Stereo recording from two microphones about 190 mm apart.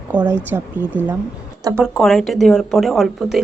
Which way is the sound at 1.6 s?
20° right (ahead or behind).